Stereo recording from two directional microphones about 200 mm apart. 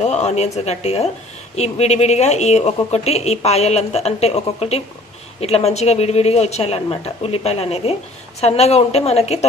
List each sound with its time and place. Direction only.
0.0 s a woman's voice: 35° left (ahead or behind)